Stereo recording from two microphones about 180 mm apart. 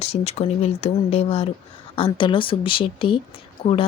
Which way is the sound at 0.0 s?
35° left (ahead or behind).